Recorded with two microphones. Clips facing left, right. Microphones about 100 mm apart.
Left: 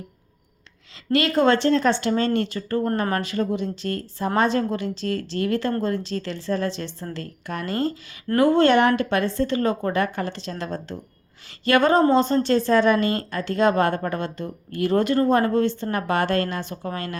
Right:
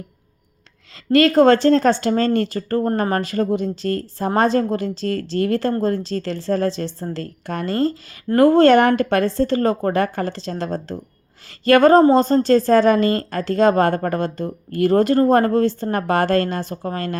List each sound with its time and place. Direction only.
1.1 s a woman's voice: 40° right (ahead or behind)